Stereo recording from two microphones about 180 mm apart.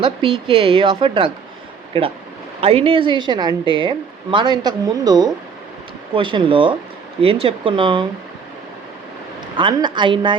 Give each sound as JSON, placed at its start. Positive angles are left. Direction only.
{"t": 0.0, "sound": "speech", "side_deg": -30}
{"t": 9.6, "sound": "speech", "side_deg": -25}